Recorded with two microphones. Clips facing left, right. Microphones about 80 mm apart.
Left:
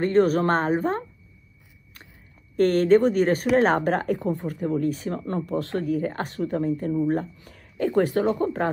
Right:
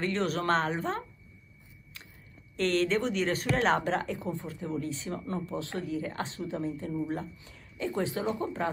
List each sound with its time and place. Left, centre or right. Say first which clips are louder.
0.0 s speech: left 10 dB; left
2.5 s speech: left 10 dB; left